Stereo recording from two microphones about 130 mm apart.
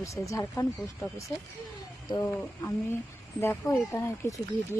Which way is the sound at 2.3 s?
15° left (ahead or behind).